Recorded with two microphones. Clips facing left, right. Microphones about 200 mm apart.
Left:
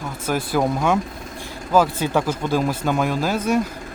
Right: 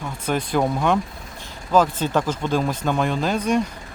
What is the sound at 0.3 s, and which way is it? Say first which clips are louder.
Speech: even; 5° left (ahead or behind).